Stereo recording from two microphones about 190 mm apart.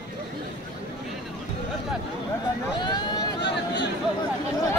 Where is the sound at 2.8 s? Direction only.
25° left (ahead or behind).